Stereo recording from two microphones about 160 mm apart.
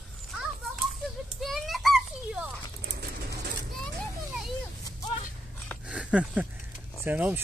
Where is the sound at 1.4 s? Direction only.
Centre (ahead or behind).